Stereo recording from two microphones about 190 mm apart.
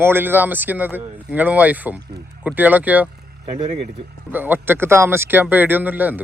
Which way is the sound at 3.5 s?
30° right (ahead or behind).